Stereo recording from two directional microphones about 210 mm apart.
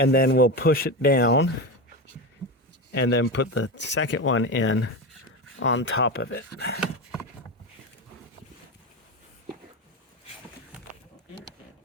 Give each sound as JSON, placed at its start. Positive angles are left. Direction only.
{"t": 0.0, "sound": "speech", "side_deg": 45}
{"t": 3.1, "sound": "speech", "side_deg": 55}
{"t": 6.7, "sound": "a sound", "side_deg": -5}